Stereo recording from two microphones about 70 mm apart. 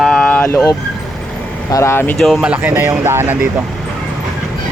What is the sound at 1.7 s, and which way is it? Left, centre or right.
Speech, left.